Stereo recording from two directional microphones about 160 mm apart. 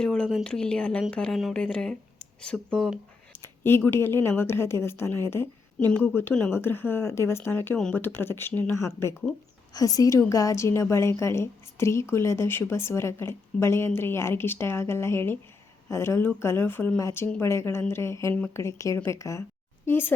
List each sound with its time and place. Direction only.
0.0 s speech: 5° left (ahead or behind)
3.4 s speech: 15° left (ahead or behind)